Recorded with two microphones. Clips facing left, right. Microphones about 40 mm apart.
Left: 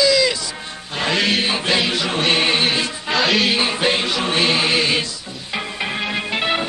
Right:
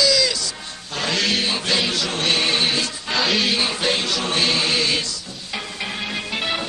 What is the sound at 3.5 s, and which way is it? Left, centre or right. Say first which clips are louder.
Music: left 3 dB; left.